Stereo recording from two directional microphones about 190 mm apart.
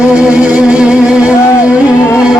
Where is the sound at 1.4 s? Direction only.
15° left (ahead or behind).